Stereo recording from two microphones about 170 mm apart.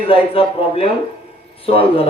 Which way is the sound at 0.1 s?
35° left (ahead or behind).